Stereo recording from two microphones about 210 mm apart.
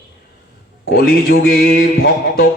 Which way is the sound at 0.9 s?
45° left (ahead or behind).